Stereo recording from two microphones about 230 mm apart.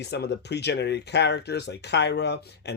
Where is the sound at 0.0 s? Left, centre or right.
Left.